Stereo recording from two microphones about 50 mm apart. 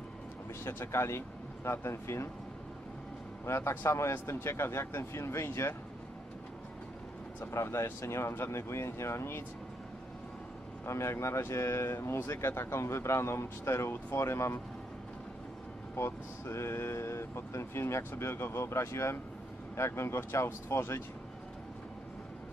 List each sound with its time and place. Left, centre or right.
0.7 s speech: left
3.4 s speech: left
7.3 s speech: left
10.9 s speech: left
16.0 s speech: left
19.8 s speech: left